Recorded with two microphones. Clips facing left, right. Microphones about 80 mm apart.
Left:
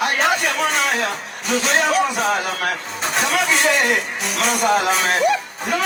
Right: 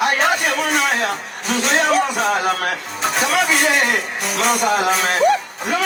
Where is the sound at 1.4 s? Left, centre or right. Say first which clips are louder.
Even; centre.